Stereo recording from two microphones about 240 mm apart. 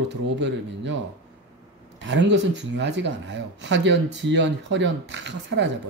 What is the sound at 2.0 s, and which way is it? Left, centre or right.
Speech, right.